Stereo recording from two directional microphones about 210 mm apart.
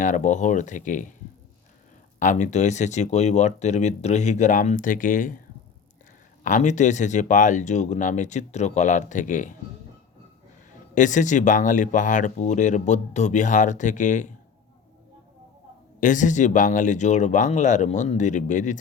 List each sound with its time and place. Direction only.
0.0 s speech: 35° left (ahead or behind)
2.1 s speech: 35° left (ahead or behind)
6.4 s speech: 35° left (ahead or behind)
10.9 s speech: 35° left (ahead or behind)
16.0 s speech: 35° left (ahead or behind)